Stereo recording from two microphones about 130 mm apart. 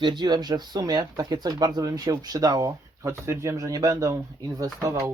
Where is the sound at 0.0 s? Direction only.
35° right (ahead or behind).